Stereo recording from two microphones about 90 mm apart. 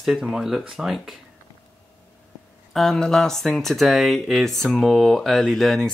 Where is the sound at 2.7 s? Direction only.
5° left (ahead or behind).